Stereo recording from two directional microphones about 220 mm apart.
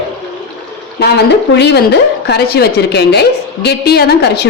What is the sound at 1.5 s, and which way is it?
A woman's voice, 50° left (ahead or behind).